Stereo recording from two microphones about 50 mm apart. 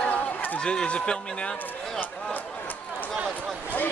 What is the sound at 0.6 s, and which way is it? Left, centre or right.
Speech, centre.